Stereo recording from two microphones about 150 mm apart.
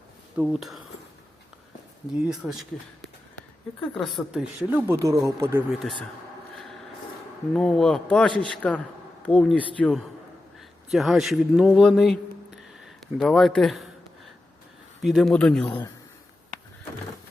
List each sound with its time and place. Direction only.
0.3 s speech: 5° right (ahead or behind)
2.2 s speech: 5° right (ahead or behind)
3.3 s a sound: 10° left (ahead or behind)
4.0 s speech: centre (ahead or behind)
5.0 s speech: 20° right (ahead or behind)
7.5 s speech: 5° left (ahead or behind)
15.0 s speech: centre (ahead or behind)